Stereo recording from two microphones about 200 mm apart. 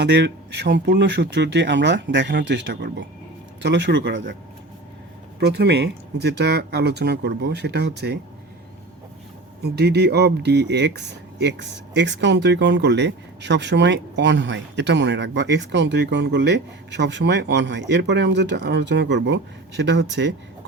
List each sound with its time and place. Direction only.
0.0 s speech: 60° right (ahead or behind)
5.4 s speech: 55° right (ahead or behind)
9.6 s speech: 55° right (ahead or behind)